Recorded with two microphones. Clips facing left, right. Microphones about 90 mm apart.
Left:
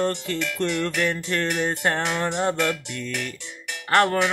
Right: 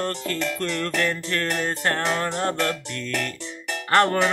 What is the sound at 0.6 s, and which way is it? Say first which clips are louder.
Music: left 3 dB; 15° left (ahead or behind).